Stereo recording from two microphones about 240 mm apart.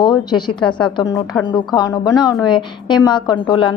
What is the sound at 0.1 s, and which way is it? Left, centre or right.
A woman's voice, centre.